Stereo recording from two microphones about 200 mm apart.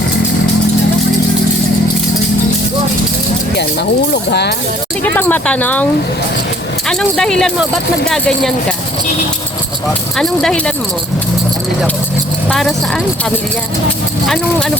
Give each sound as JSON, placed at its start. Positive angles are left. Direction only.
{"t": 3.6, "sound": "speech", "side_deg": 55}
{"t": 5.0, "sound": "speech", "side_deg": 10}
{"t": 6.8, "sound": "speech", "side_deg": 5}
{"t": 10.2, "sound": "speech", "side_deg": 5}
{"t": 12.5, "sound": "speech", "side_deg": 0}